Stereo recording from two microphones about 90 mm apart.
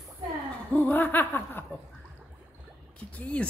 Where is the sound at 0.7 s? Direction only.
20° left (ahead or behind).